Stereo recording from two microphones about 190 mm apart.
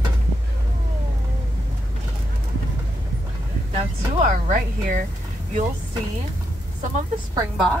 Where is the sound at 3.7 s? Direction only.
40° right (ahead or behind).